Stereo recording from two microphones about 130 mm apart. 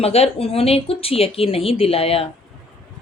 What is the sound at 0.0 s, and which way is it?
Speech, 50° left (ahead or behind).